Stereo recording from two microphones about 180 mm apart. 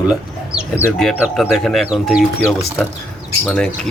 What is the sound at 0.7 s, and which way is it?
Speech, 10° left (ahead or behind).